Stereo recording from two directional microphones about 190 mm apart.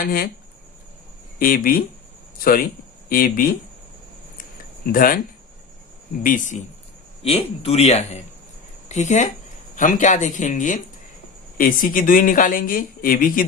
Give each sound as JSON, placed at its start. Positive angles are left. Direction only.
{"t": 0.0, "sound": "speech", "side_deg": 50}
{"t": 1.4, "sound": "speech", "side_deg": 50}
{"t": 3.1, "sound": "speech", "side_deg": 45}
{"t": 4.9, "sound": "speech", "side_deg": 50}
{"t": 6.2, "sound": "speech", "side_deg": 40}
{"t": 7.2, "sound": "a man's voice", "side_deg": 30}